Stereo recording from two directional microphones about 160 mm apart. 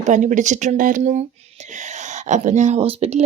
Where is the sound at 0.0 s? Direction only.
50° right (ahead or behind).